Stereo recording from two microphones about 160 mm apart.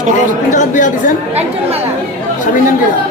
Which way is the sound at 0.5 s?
55° left (ahead or behind).